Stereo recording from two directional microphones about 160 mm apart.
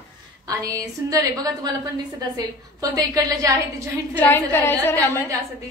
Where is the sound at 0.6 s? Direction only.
20° right (ahead or behind).